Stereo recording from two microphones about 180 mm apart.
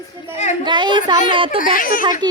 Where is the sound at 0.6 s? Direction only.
25° right (ahead or behind).